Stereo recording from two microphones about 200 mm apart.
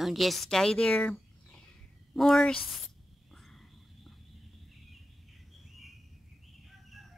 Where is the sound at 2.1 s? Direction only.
Centre (ahead or behind).